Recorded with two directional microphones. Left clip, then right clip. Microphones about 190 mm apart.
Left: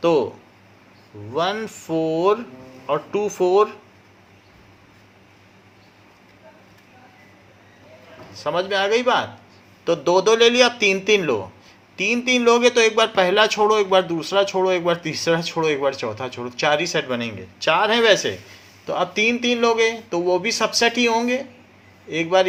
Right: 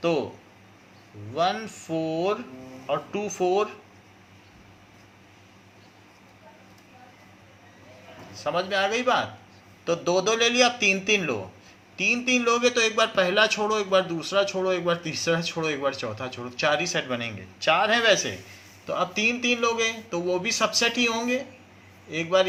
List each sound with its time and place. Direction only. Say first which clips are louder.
0.0 s speech: left 7 dB; 50° left (ahead or behind)
1.3 s speech: left 3 dB; 55° left (ahead or behind)
8.3 s a man's voice: left 4 dB; 45° left (ahead or behind)